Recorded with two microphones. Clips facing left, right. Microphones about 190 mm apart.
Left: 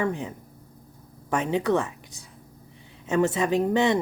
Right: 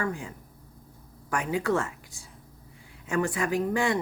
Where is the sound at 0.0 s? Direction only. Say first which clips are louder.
Left 5 dB; 20° left (ahead or behind).